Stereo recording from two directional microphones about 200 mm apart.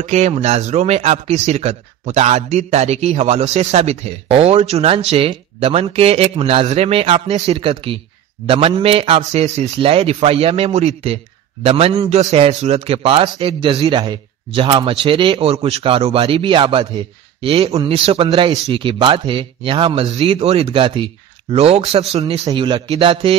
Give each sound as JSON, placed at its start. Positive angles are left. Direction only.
{"t": 0.0, "sound": "a man's voice", "side_deg": -35}